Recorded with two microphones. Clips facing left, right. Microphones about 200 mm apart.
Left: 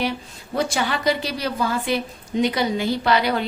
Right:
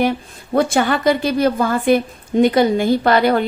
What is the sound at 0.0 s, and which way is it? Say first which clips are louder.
A woman's voice: right 7 dB; 50° right (ahead or behind).